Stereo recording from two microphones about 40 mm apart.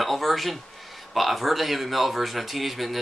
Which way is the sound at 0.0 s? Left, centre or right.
Centre.